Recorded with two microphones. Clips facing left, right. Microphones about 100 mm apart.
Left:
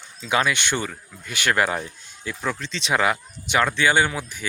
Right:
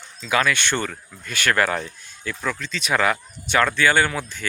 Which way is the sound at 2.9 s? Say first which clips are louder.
Right 1 dB; 15° left (ahead or behind).